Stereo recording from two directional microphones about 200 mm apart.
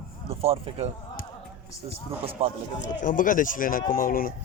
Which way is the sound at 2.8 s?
40° left (ahead or behind).